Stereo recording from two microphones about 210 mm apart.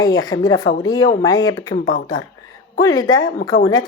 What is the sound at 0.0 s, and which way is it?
A woman's voice, 20° left (ahead or behind).